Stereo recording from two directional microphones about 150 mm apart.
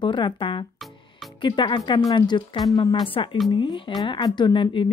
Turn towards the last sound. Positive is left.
turn(degrees=35)  # may be behind; listen again after turning